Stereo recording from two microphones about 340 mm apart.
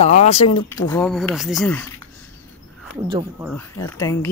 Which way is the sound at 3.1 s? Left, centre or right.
Centre.